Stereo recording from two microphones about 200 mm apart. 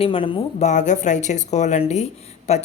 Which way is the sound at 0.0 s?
25° left (ahead or behind).